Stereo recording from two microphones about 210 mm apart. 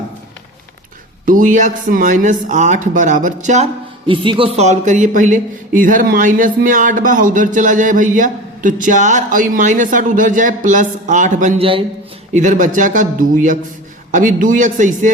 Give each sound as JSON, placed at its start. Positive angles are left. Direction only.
{"t": 1.2, "sound": "speech", "side_deg": -40}
{"t": 12.3, "sound": "speech", "side_deg": -35}